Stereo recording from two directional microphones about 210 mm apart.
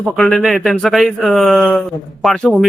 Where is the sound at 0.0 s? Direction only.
Centre (ahead or behind).